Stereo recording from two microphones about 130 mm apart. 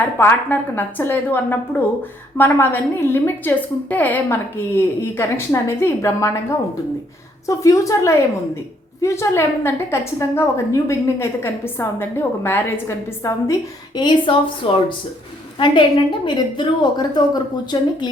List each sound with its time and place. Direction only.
0.2 s a woman's voice: 15° left (ahead or behind)
7.4 s a woman's voice: 25° left (ahead or behind)